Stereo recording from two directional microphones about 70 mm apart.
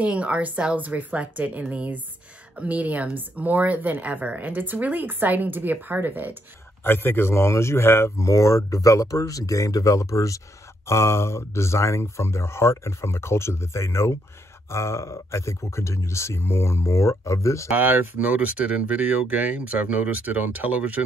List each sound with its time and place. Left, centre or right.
0.0 s speech: centre
6.8 s speech: left
17.6 s speech: right